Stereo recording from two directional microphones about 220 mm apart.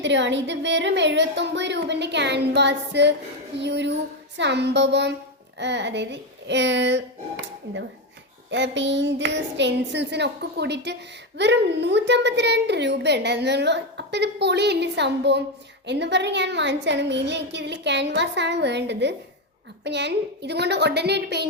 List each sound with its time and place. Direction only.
0.0 s a woman's voice: 55° right (ahead or behind)